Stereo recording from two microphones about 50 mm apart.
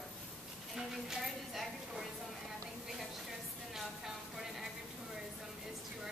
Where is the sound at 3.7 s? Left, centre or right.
Centre.